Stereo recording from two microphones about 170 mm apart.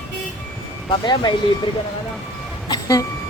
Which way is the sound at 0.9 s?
25° left (ahead or behind).